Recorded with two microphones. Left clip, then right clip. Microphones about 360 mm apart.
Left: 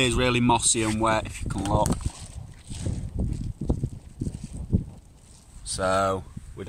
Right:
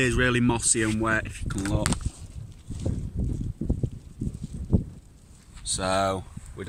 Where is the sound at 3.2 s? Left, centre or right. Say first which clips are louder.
Left 2 dB; left.